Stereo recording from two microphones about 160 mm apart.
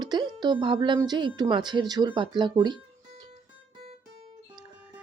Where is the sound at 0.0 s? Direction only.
25° right (ahead or behind).